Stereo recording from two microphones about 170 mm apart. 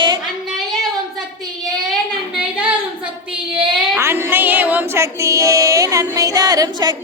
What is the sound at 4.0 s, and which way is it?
Music, 15° right (ahead or behind).